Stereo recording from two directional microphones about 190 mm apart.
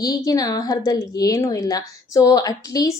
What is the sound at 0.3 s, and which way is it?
Female singing, 20° left (ahead or behind).